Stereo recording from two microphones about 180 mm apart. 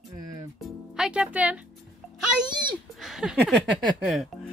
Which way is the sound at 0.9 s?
5° right (ahead or behind).